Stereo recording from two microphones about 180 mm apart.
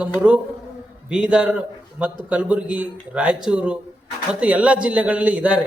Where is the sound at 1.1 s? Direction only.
5° right (ahead or behind).